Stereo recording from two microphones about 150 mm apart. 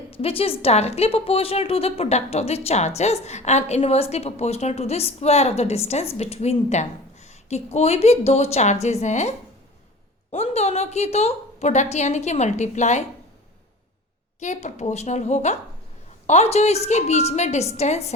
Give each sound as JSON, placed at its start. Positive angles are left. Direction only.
{"t": 0.1, "sound": "a woman's voice", "side_deg": 40}
{"t": 10.3, "sound": "a woman's voice", "side_deg": 45}
{"t": 14.3, "sound": "a woman's voice", "side_deg": 50}